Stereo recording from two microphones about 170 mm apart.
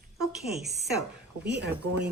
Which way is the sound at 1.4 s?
80° right.